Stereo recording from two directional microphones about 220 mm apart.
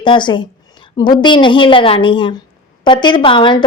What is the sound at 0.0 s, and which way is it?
A woman's voice, 20° left (ahead or behind).